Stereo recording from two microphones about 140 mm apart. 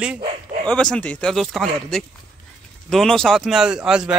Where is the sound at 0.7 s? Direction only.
5° left (ahead or behind).